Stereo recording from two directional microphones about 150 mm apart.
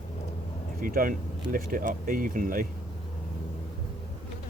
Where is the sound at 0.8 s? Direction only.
70° right (ahead or behind).